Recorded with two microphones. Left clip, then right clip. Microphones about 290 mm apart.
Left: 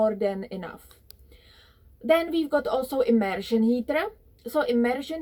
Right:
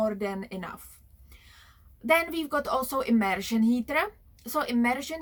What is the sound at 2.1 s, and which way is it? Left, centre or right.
A woman's voice, centre.